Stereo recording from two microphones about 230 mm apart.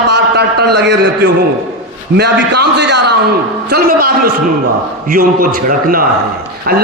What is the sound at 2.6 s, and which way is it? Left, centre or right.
A man's voice, right.